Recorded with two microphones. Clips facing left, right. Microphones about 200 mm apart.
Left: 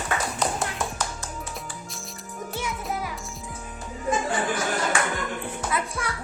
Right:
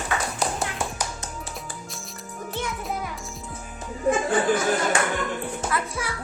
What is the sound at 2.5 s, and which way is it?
Music, 5° left (ahead or behind).